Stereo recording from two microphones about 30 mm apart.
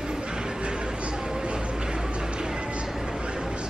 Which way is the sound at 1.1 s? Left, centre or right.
Right.